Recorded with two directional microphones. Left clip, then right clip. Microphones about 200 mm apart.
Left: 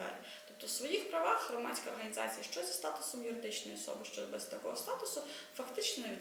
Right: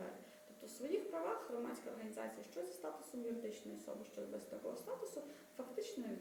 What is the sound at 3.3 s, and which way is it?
A woman's voice, 5° right (ahead or behind).